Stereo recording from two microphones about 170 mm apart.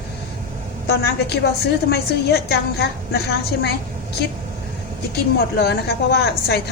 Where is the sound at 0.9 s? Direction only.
70° left (ahead or behind).